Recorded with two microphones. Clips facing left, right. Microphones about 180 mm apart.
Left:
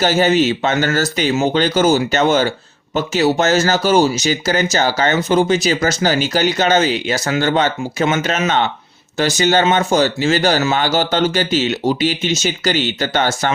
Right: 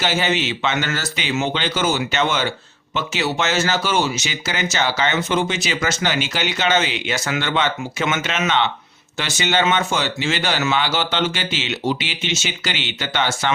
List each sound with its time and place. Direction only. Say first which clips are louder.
0.0 s speech: left 7 dB; 40° left (ahead or behind)